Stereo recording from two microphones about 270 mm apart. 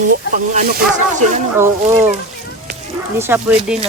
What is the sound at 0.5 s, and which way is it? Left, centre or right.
Speech, right.